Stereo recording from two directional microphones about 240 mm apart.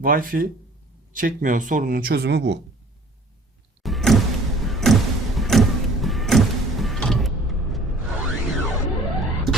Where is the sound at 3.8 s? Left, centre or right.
Centre.